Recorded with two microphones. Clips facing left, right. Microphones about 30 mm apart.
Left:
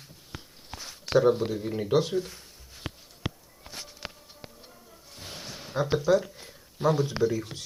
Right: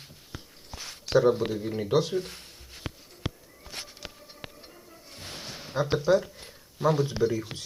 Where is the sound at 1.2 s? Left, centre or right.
Centre.